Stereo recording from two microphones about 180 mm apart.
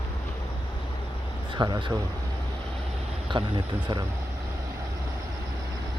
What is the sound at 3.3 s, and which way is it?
Speech, 25° right (ahead or behind).